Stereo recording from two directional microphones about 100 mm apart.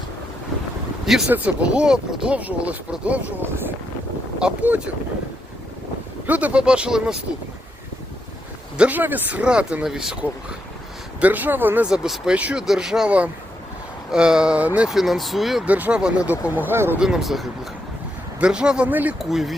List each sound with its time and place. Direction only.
1.3 s speech: 15° right (ahead or behind)
6.2 s speech: 15° right (ahead or behind)
8.8 s speech: 15° right (ahead or behind)
11.2 s speech: 15° right (ahead or behind)
11.9 s speech: 5° right (ahead or behind)
14.8 s speech: centre (ahead or behind)
15.6 s speech: 15° right (ahead or behind)
17.0 s speech: 5° right (ahead or behind)
19.2 s speech: 5° right (ahead or behind)